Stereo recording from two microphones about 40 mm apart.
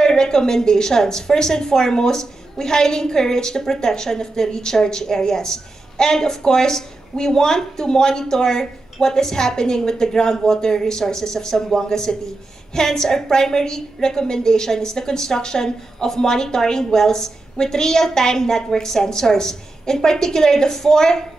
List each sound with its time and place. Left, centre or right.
0.0 s a woman's voice: centre